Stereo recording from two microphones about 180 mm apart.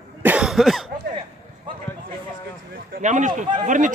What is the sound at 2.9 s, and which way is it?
Speech, 45° right (ahead or behind).